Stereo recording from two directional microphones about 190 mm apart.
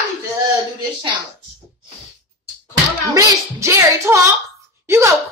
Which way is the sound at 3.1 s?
15° right (ahead or behind).